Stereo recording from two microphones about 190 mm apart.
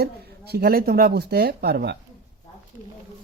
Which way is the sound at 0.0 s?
55° right (ahead or behind).